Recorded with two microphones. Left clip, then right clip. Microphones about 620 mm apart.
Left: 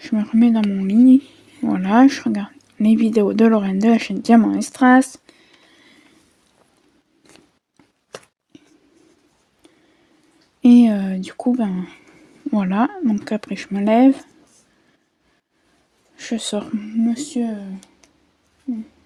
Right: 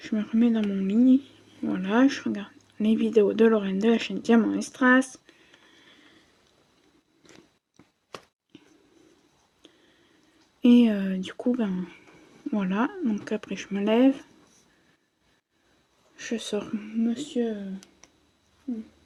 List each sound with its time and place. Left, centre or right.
0.0 s speech: centre
10.6 s speech: centre
16.1 s speech: centre